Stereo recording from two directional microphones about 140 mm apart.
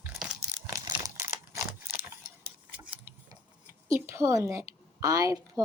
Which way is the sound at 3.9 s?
20° right (ahead or behind).